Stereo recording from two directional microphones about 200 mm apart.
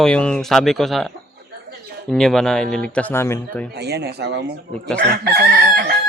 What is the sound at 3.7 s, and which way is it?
Speech, 55° right (ahead or behind).